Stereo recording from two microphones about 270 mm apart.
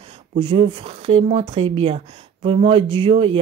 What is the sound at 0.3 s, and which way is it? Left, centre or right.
Speech, centre.